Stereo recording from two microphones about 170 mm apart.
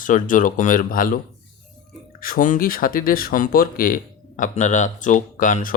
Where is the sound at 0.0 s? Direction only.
50° left (ahead or behind).